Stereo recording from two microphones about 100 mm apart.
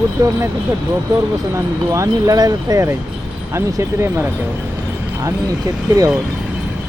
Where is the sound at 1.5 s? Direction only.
35° right (ahead or behind).